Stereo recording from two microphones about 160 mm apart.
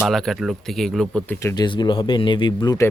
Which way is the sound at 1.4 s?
25° left (ahead or behind).